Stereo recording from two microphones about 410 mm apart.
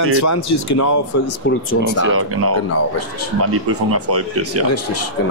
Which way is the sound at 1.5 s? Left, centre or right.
Left.